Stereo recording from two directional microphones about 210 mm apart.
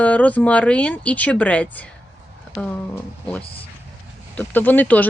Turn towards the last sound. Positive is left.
turn(degrees=10)  # may be behind; listen again after turning